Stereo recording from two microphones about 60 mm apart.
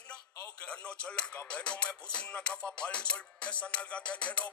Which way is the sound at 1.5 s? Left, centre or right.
Centre.